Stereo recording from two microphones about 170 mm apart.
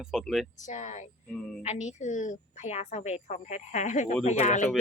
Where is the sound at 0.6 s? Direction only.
45° left (ahead or behind).